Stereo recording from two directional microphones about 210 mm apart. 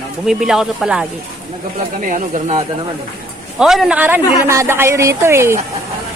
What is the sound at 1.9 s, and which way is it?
Speech, 35° right (ahead or behind).